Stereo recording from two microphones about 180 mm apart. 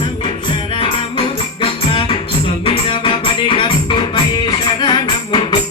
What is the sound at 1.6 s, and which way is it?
Music, 30° left (ahead or behind).